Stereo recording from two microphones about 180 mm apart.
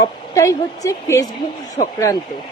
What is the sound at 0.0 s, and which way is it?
A woman's voice, 15° left (ahead or behind).